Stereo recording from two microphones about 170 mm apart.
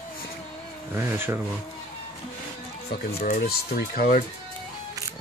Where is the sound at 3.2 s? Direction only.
50° left (ahead or behind).